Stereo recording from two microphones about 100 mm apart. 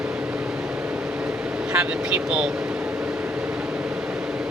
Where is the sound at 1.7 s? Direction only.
10° right (ahead or behind).